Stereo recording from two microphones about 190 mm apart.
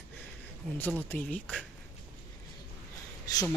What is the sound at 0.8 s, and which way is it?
Speech, 10° left (ahead or behind).